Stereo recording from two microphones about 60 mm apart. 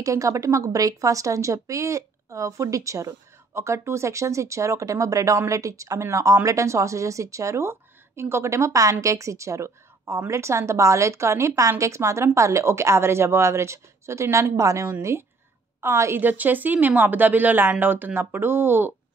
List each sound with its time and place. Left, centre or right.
0.0 s speech: right
7.7 s a woman's voice: right
16.2 s a woman's voice: right